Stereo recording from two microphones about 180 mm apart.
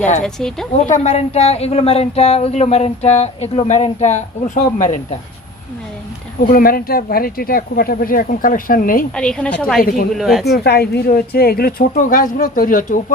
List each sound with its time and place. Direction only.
0.2 s a woman's voice: 5° left (ahead or behind)
0.7 s speech: 40° left (ahead or behind)
6.5 s a woman's voice: 55° left (ahead or behind)
9.1 s a woman's voice: 5° left (ahead or behind)
10.4 s a woman's voice: 65° left (ahead or behind); by 13.1 s 50° left (ahead or behind)